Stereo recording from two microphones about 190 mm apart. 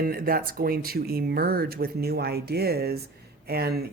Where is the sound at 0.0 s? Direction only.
50° right (ahead or behind).